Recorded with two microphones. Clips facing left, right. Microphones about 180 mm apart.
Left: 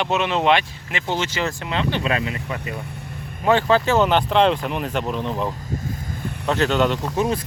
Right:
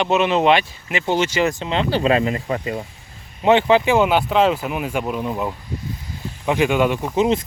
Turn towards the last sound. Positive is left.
turn(degrees=-20)  # may be behind; listen again after turning